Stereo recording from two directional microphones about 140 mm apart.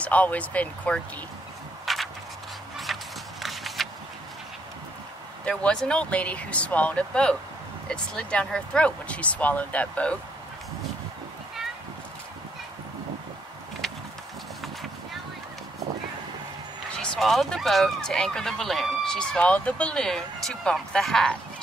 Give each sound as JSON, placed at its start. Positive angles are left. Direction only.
{"t": 0.0, "sound": "speech", "side_deg": 10}
{"t": 1.9, "sound": "a sound", "side_deg": 0}
{"t": 2.9, "sound": "horse", "side_deg": 0}
{"t": 3.4, "sound": "a sound", "side_deg": 0}
{"t": 5.4, "sound": "speech", "side_deg": 10}
{"t": 16.9, "sound": "speech", "side_deg": 5}